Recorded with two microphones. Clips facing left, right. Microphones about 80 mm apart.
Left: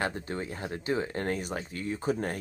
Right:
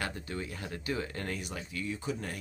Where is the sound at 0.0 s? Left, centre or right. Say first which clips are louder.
Left 5 dB; left.